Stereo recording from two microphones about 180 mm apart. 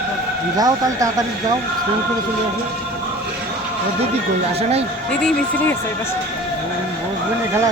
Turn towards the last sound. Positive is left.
turn(degrees=5)  # may be behind; listen again after turning